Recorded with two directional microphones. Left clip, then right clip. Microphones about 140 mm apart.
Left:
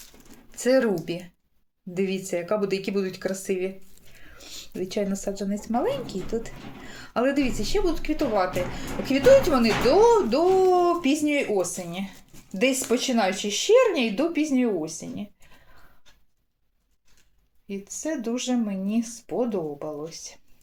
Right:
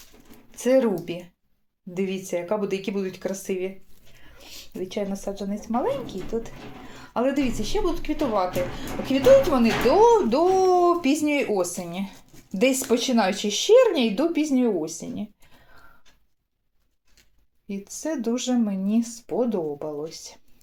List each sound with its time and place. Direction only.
0.5 s a woman's voice: centre (ahead or behind)
4.5 s speech: 15° left (ahead or behind)
7.0 s a woman's voice: 10° left (ahead or behind)
9.8 s speech: 5° right (ahead or behind)
10.2 s speech: 20° right (ahead or behind); by 15.3 s 35° right (ahead or behind)
17.7 s speech: 30° right (ahead or behind)